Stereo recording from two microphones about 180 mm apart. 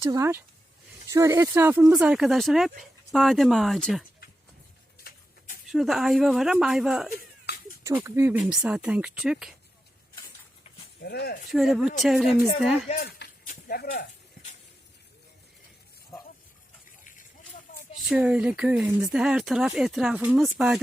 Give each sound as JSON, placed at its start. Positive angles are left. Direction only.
{"t": 0.0, "sound": "speech", "side_deg": -15}
{"t": 5.6, "sound": "speech", "side_deg": 0}
{"t": 7.9, "sound": "speech", "side_deg": -15}
{"t": 11.0, "sound": "speech", "side_deg": 65}
{"t": 11.5, "sound": "speech", "side_deg": 0}
{"t": 13.0, "sound": "a sound", "side_deg": 55}
{"t": 17.0, "sound": "a sound", "side_deg": 45}
{"t": 18.1, "sound": "speech", "side_deg": -5}